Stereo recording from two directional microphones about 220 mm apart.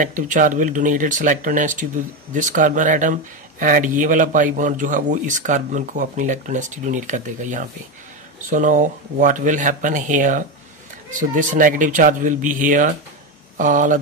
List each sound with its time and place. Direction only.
0.0 s speech: 35° right (ahead or behind)